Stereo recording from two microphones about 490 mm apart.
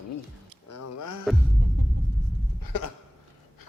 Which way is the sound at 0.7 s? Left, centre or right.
Left.